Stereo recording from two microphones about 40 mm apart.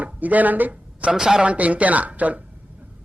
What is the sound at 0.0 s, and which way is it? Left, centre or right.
Speech, right.